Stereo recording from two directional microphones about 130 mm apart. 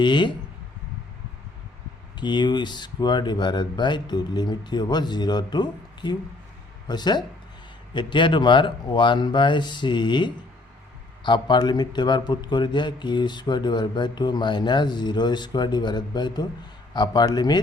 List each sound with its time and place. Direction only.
0.0 s a man's voice: 35° left (ahead or behind)
2.1 s a man's voice: 35° left (ahead or behind)